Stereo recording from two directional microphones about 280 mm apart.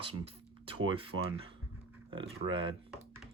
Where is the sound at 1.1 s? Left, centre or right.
Right.